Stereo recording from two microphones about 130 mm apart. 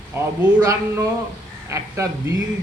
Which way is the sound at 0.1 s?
20° right (ahead or behind).